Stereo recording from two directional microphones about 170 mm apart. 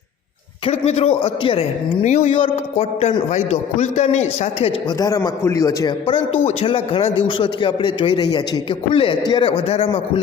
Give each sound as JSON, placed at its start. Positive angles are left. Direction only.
{"t": 0.6, "sound": "a man's voice", "side_deg": 40}
{"t": 2.0, "sound": "a man's voice", "side_deg": 45}
{"t": 4.9, "sound": "a man's voice", "side_deg": 20}
{"t": 6.1, "sound": "a man's voice", "side_deg": 35}